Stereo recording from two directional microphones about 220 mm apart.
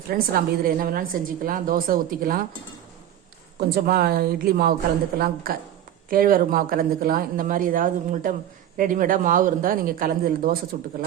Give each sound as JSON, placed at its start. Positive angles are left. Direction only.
{"t": 0.1, "sound": "a woman's voice", "side_deg": -40}
{"t": 3.6, "sound": "a woman's voice", "side_deg": -45}